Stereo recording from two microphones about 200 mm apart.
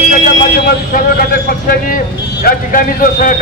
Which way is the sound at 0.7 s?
45° left (ahead or behind).